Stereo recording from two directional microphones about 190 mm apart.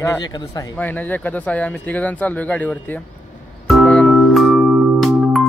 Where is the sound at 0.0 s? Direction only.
15° left (ahead or behind).